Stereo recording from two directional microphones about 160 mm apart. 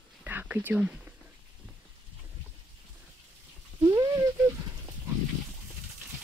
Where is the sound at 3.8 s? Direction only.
25° right (ahead or behind).